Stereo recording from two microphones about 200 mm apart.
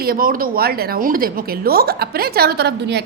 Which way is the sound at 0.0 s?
45° right (ahead or behind).